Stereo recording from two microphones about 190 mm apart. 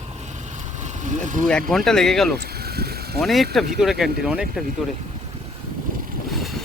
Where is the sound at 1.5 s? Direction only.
5° left (ahead or behind).